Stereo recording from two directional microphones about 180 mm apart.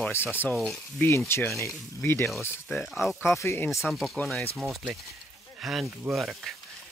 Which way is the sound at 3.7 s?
Centre (ahead or behind).